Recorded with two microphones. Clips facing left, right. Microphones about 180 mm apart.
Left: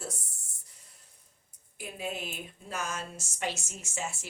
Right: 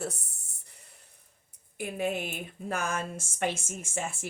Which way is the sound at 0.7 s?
60° right (ahead or behind).